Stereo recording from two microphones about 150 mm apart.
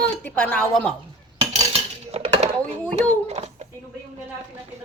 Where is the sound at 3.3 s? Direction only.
45° right (ahead or behind).